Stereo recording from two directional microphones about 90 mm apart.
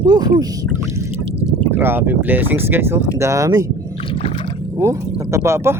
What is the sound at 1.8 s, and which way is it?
Speech, 25° right (ahead or behind).